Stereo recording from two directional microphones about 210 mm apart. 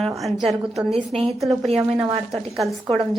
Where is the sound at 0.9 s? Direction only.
30° right (ahead or behind).